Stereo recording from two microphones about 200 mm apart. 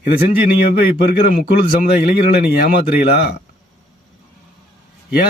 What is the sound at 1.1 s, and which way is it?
A man's voice, 45° left (ahead or behind).